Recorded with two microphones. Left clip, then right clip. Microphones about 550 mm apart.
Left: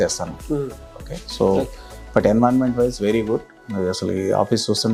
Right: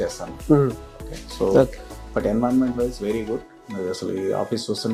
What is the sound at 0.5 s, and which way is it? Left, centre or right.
Speech, right.